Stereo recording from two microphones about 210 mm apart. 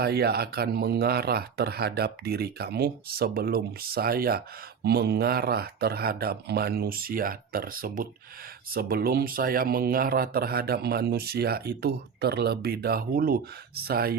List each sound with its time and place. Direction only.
0.0 s speech: 50° right (ahead or behind)